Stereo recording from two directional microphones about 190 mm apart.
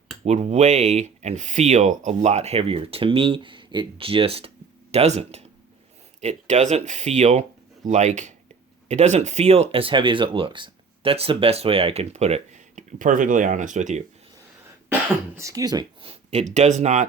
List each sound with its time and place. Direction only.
0.3 s speech: 35° right (ahead or behind)
15.4 s speech: 15° right (ahead or behind); by 17.1 s 35° right (ahead or behind)